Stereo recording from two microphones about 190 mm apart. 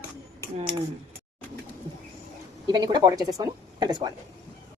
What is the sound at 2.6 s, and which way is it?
A woman's voice, 20° right (ahead or behind).